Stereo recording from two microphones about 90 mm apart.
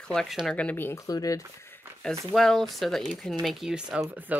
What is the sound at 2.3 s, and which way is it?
Speech, 5° left (ahead or behind).